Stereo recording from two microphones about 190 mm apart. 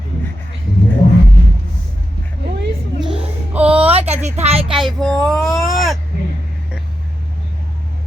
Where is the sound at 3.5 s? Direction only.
5° right (ahead or behind).